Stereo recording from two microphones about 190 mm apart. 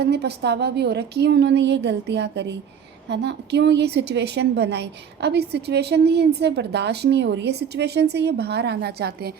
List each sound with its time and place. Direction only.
0.0 s a woman's voice: 60° right (ahead or behind)